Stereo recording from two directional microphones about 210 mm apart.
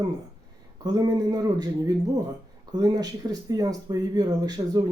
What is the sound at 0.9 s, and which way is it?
Speech, 20° right (ahead or behind).